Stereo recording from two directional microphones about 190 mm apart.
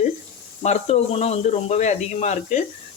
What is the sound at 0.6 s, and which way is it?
Speech, 35° left (ahead or behind).